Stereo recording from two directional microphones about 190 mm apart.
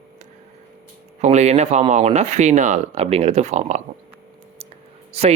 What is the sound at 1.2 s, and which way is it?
Speech, 35° right (ahead or behind).